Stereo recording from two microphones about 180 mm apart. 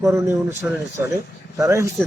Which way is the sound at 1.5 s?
15° right (ahead or behind).